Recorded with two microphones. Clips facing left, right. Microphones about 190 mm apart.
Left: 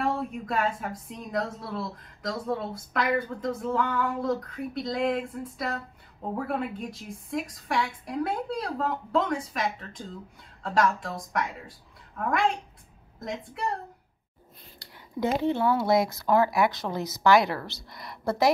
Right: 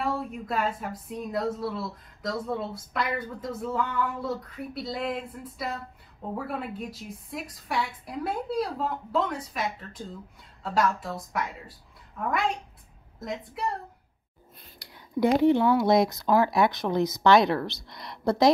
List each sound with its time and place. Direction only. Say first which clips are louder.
0.0 s speech: left 1 dB; centre (ahead or behind)
13.2 s speech: even; centre (ahead or behind)
14.8 s speech: right 4 dB; 15° right (ahead or behind)
17.9 s a woman's voice: right 3 dB; 5° left (ahead or behind)